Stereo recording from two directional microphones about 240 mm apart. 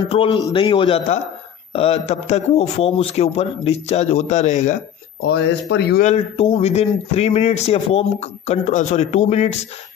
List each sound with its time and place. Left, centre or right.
0.1 s a man's voice: centre
5.2 s speech: left
6.0 s a man's voice: left